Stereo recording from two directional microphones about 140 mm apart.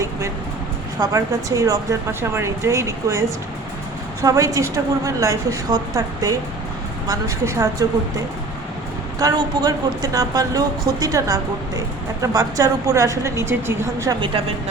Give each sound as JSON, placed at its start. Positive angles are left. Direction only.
{"t": 0.9, "sound": "speech", "side_deg": -25}
{"t": 9.1, "sound": "speech", "side_deg": -25}
{"t": 14.2, "sound": "a woman's voice", "side_deg": -40}